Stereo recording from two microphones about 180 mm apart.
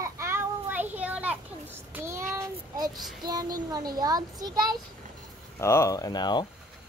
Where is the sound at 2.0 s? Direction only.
15° right (ahead or behind).